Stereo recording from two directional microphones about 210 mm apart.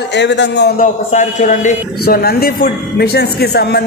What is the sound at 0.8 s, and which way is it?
A man's voice, 35° left (ahead or behind).